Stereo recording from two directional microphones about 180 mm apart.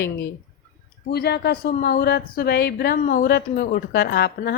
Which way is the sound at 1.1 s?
65° left (ahead or behind).